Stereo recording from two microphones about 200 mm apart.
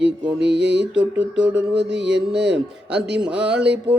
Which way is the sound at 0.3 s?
60° right (ahead or behind).